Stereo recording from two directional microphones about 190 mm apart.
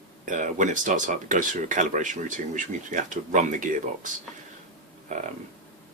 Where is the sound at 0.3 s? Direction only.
45° right (ahead or behind).